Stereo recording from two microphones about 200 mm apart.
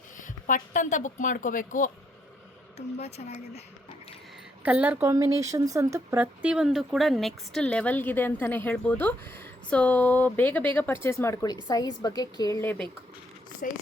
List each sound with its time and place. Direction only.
0.2 s a woman's voice: 40° left (ahead or behind)
4.6 s speech: 5° right (ahead or behind); by 12.8 s 10° left (ahead or behind)
13.6 s speech: 45° left (ahead or behind)